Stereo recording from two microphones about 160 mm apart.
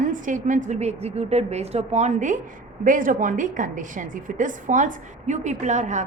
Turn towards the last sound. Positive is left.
turn(degrees=-45)  # may be behind; listen again after turning